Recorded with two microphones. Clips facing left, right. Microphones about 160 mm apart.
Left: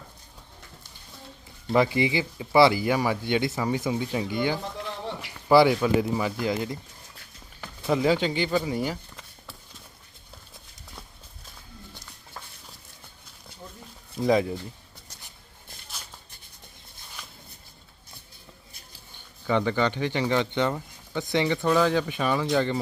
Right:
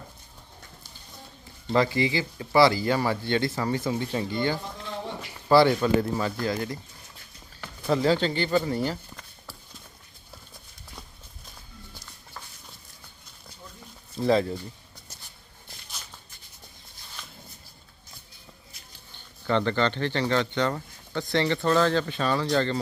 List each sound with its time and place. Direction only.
1.7 s speech: 20° left (ahead or behind)
7.9 s speech: 10° left (ahead or behind)
14.2 s speech: 10° left (ahead or behind)
19.1 s speech: 10° left (ahead or behind)